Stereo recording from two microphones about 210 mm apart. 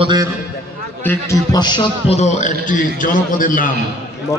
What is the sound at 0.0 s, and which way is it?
Speech, 20° right (ahead or behind).